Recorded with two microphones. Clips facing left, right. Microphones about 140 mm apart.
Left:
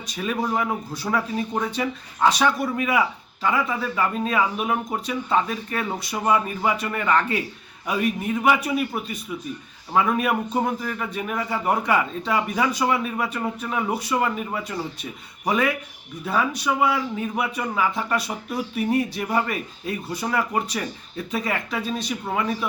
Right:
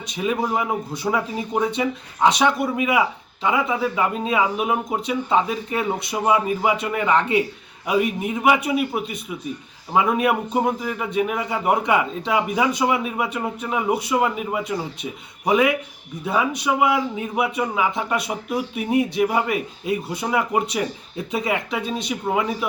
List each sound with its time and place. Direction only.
0.1 s speech: 15° right (ahead or behind)